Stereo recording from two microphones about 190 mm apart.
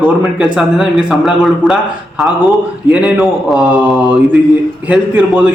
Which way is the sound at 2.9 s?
5° right (ahead or behind).